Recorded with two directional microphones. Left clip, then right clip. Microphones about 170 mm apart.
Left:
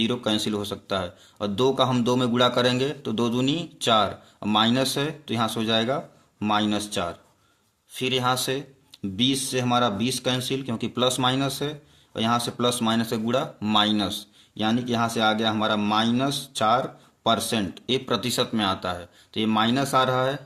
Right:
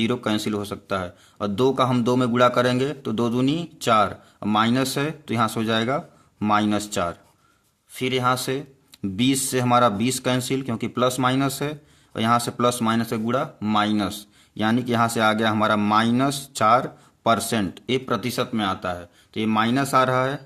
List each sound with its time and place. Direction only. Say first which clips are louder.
0.0 s speech: right 1 dB; 30° right (ahead or behind)
8.9 s speech: right 1 dB; 40° right (ahead or behind)